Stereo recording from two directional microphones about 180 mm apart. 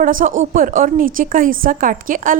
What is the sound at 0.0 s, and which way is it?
A woman's voice, 50° right (ahead or behind).